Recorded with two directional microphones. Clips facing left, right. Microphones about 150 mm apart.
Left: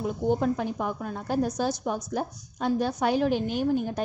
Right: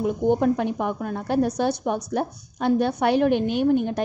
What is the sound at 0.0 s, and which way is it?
A woman's voice, 60° right (ahead or behind).